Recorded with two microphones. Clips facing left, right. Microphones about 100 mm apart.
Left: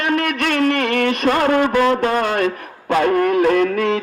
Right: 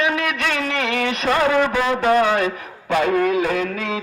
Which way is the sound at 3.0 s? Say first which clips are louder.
Left 3 dB; 50° left (ahead or behind).